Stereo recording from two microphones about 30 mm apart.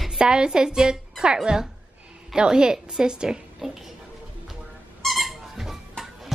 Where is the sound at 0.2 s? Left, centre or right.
Right.